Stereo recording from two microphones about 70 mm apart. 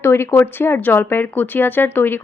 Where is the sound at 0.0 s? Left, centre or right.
Left.